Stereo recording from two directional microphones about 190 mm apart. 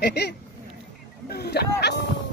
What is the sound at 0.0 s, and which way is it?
Speech, 60° left (ahead or behind).